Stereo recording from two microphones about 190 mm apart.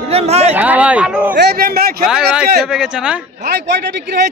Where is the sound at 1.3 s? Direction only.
55° right (ahead or behind).